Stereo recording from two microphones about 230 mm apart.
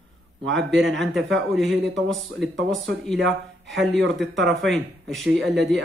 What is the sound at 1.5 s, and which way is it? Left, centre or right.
Speech, centre.